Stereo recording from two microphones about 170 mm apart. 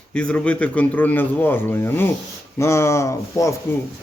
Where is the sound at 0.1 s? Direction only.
5° left (ahead or behind).